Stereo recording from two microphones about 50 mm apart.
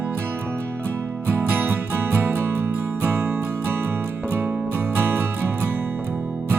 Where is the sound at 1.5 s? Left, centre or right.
Right.